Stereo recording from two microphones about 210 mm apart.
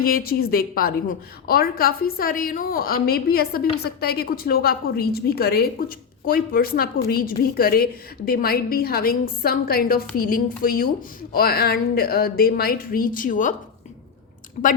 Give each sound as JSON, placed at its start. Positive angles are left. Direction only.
{"t": 0.0, "sound": "a woman's voice", "side_deg": 45}